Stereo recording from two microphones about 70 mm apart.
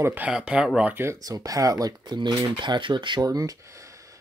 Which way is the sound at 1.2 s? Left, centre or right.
Right.